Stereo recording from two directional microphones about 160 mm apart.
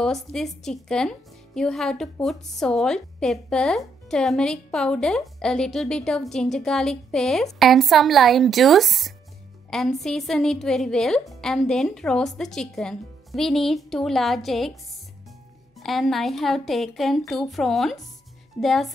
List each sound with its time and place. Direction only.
0.0 s speech: 5° left (ahead or behind)
15.8 s speech: centre (ahead or behind)